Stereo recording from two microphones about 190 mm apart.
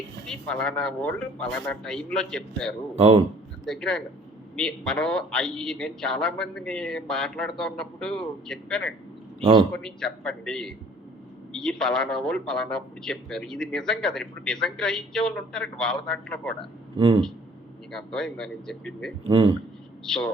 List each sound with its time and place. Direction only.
0.3 s a man's voice: 5° left (ahead or behind)
2.9 s a man's voice: 30° right (ahead or behind)
3.7 s a man's voice: 5° left (ahead or behind)
17.0 s speech: 30° right (ahead or behind)
17.9 s a man's voice: 5° left (ahead or behind)
19.3 s speech: 30° right (ahead or behind)
20.1 s a man's voice: 5° left (ahead or behind)